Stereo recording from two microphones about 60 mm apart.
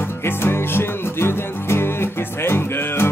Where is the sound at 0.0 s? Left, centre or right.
Left.